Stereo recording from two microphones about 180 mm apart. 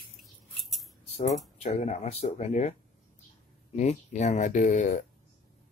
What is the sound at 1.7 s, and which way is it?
Speech, 40° left (ahead or behind).